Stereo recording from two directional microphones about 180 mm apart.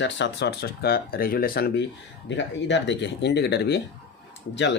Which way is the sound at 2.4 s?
80° left.